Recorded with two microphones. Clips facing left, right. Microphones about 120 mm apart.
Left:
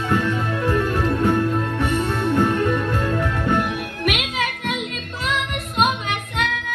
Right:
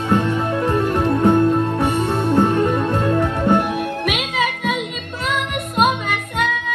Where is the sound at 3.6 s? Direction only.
45° right (ahead or behind).